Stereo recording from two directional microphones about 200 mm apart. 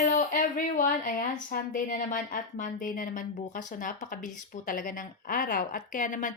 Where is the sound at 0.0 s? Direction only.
40° left (ahead or behind).